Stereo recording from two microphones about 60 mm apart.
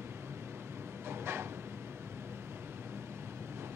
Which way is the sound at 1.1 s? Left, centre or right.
Right.